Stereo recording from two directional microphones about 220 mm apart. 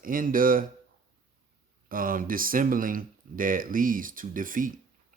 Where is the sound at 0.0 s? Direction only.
40° right (ahead or behind).